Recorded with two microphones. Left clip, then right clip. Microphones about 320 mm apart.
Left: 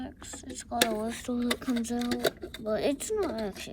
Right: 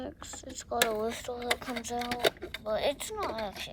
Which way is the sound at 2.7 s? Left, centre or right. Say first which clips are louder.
Left 3 dB; centre.